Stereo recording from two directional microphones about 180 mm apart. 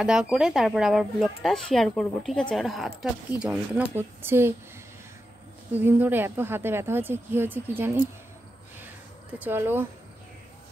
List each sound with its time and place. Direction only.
0.0 s a woman's voice: 5° right (ahead or behind)
5.7 s a woman's voice: 10° right (ahead or behind)
9.4 s a woman's voice: 10° right (ahead or behind)